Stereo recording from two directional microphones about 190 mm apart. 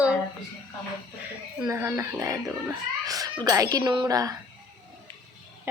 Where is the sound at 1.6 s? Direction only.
15° right (ahead or behind).